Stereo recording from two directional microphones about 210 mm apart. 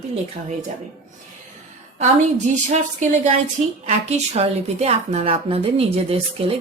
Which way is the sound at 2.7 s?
35° right (ahead or behind).